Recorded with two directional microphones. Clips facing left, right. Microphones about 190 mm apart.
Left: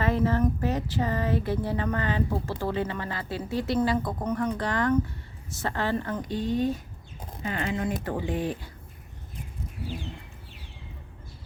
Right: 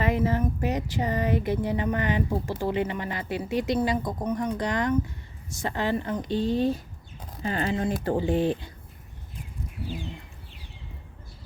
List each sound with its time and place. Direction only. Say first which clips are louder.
0.0 s speech: even; 15° right (ahead or behind)